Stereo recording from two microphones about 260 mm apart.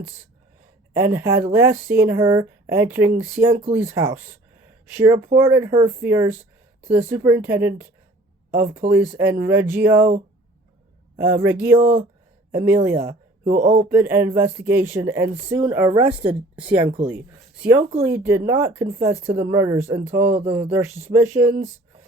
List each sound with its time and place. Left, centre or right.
0.9 s speech: centre
11.2 s speech: centre
13.5 s speech: right
13.7 s speech: centre
16.1 s speech: centre
16.6 s speech: centre